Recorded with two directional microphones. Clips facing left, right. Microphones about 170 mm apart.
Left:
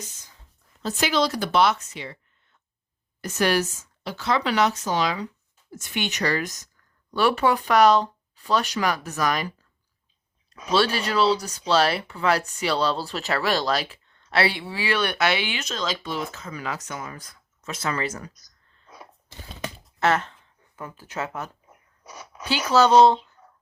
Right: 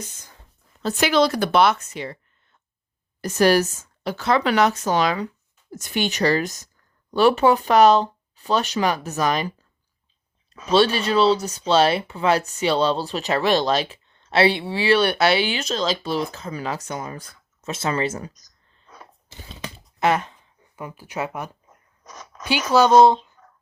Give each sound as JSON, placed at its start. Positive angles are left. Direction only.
{"t": 0.8, "sound": "speech", "side_deg": -65}
{"t": 5.7, "sound": "speech", "side_deg": -35}
{"t": 10.7, "sound": "speech", "side_deg": -20}
{"t": 20.0, "sound": "speech", "side_deg": -15}
{"t": 21.7, "sound": "a sound", "side_deg": 10}
{"t": 22.7, "sound": "speech", "side_deg": -10}